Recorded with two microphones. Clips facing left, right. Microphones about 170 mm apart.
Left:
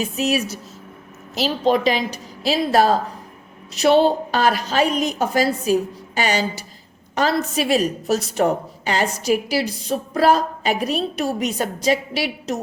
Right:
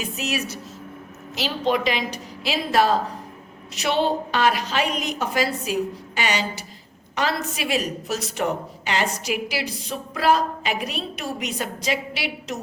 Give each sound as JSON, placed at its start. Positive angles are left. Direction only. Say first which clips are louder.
{"t": 1.4, "sound": "a woman's voice", "louder": "left 4 dB", "side_deg": 40}